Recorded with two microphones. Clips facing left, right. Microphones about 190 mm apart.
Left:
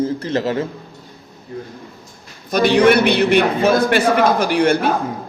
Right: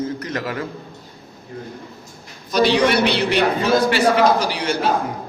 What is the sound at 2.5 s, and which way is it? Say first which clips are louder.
A man's voice: left 4 dB; 55° left (ahead or behind).